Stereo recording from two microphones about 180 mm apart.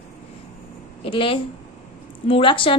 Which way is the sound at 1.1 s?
30° left (ahead or behind).